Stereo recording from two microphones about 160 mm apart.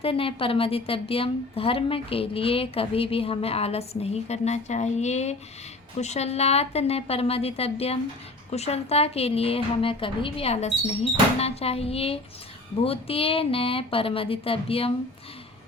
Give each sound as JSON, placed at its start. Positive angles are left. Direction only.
{"t": 0.0, "sound": "a woman's voice", "side_deg": 35}